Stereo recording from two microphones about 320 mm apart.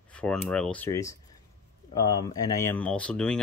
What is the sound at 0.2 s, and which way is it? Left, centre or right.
Speech, centre.